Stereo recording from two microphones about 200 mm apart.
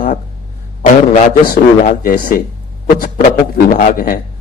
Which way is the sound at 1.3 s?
45° left (ahead or behind).